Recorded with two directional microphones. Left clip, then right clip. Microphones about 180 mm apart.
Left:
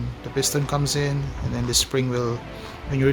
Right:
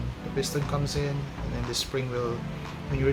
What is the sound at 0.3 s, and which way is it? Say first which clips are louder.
Speech: left 6 dB; 65° left (ahead or behind).